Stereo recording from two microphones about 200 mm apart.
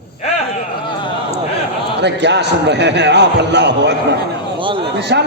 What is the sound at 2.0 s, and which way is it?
A man's voice, 60° right (ahead or behind).